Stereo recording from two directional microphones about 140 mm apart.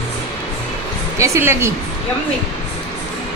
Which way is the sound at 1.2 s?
20° right (ahead or behind).